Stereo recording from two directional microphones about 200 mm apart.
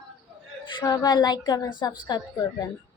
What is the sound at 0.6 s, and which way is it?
A woman's voice, 20° left (ahead or behind).